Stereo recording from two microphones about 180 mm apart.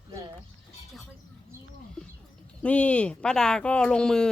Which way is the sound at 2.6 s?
5° left (ahead or behind).